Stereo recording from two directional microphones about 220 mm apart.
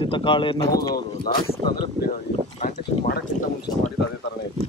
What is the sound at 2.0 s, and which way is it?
Speech, 35° left (ahead or behind).